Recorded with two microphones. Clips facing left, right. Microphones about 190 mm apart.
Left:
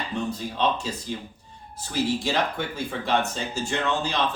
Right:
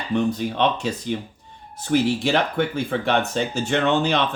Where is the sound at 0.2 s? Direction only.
65° right (ahead or behind).